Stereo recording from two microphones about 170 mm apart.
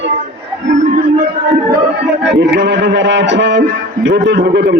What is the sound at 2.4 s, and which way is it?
A man's voice, 85° right.